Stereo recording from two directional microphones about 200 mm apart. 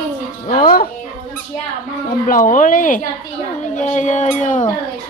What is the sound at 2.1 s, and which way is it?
A woman's voice, 40° left (ahead or behind).